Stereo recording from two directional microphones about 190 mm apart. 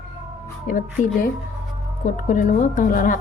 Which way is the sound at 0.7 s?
45° left (ahead or behind).